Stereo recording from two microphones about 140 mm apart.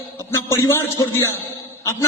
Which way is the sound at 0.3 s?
20° left (ahead or behind).